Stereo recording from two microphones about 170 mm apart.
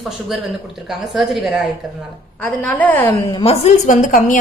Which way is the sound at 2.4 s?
10° left (ahead or behind).